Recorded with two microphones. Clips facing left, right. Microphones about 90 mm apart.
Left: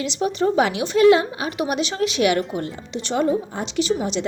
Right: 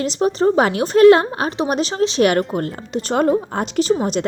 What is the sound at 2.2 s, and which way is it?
A woman's voice, 45° right (ahead or behind).